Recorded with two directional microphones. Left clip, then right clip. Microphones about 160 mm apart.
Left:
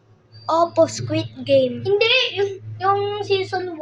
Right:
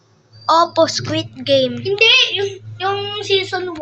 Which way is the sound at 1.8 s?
50° right (ahead or behind).